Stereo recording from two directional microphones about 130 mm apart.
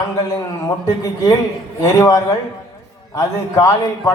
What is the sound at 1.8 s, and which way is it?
A man's voice, 25° left (ahead or behind).